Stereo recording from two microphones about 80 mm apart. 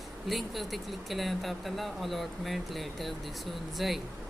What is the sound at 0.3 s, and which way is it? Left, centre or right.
Speech, centre.